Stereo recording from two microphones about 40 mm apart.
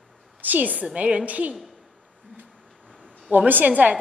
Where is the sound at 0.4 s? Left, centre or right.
Right.